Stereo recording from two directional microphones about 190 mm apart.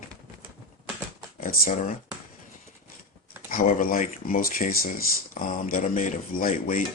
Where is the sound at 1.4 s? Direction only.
50° left (ahead or behind).